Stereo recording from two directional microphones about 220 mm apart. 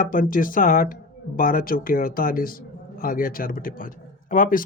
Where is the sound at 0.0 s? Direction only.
40° left (ahead or behind).